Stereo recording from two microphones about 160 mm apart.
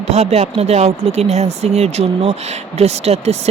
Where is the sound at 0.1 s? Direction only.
40° right (ahead or behind).